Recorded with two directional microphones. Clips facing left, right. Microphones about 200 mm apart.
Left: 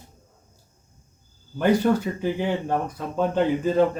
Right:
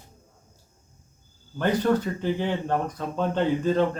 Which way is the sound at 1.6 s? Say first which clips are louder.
Left 3 dB; 10° left (ahead or behind).